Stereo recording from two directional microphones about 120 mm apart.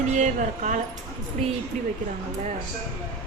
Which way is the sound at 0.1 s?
90° right.